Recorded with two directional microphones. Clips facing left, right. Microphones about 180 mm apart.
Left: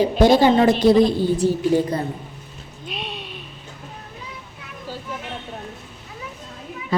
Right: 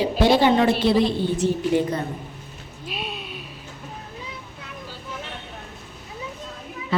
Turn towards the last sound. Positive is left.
turn(degrees=40)  # may be behind; listen again after turning